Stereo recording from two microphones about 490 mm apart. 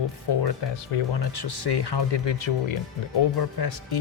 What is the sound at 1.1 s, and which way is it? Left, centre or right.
Speech, left.